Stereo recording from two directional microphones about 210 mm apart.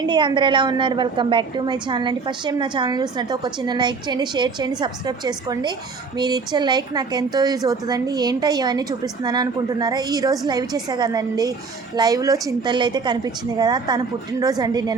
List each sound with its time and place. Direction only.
0.1 s a woman's voice: 20° right (ahead or behind)